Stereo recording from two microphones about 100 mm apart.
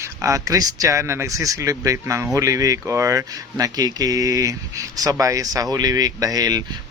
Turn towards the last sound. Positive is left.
turn(degrees=-40)  # may be behind; listen again after turning